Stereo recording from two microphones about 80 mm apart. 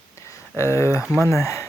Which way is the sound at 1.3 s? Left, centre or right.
Left.